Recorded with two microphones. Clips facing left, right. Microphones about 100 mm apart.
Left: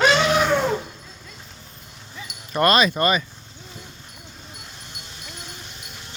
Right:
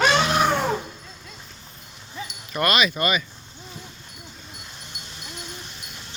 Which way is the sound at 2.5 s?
35° left (ahead or behind).